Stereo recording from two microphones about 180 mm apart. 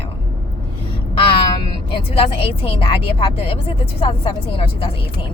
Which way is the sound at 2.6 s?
30° left (ahead or behind).